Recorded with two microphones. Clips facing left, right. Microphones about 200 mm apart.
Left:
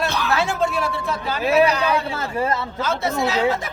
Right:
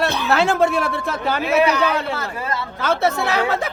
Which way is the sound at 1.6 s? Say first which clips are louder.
Even; 35° left (ahead or behind).